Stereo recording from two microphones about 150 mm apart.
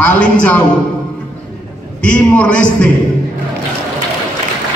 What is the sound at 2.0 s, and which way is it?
Speech, 10° left (ahead or behind).